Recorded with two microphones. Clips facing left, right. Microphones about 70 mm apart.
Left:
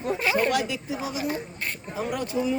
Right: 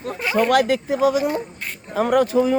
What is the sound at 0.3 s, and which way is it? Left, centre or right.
Speech, right.